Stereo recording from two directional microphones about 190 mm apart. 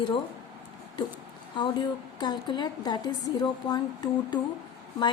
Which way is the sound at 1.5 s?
25° left (ahead or behind).